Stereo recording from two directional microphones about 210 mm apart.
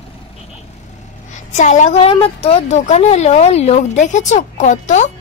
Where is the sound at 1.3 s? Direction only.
35° left (ahead or behind).